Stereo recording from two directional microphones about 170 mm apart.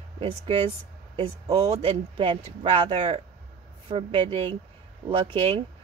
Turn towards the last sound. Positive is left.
turn(degrees=-35)  # may be behind; listen again after turning